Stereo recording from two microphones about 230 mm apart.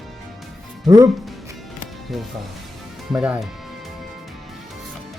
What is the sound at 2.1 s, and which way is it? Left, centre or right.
Speech, centre.